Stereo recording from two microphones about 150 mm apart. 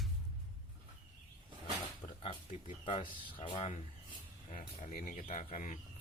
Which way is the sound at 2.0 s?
40° left (ahead or behind).